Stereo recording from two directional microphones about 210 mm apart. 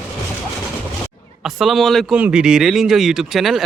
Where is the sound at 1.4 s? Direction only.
Centre (ahead or behind).